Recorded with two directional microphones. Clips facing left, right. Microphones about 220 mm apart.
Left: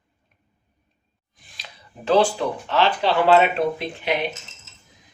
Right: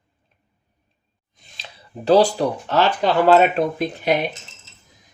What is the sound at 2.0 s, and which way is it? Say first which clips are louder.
Speech: right 4 dB; 35° right (ahead or behind).